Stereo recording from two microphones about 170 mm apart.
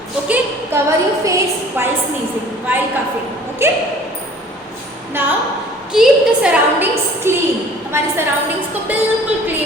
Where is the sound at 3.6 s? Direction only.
15° right (ahead or behind).